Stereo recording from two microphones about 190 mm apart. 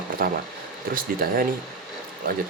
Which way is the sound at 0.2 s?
50° right (ahead or behind).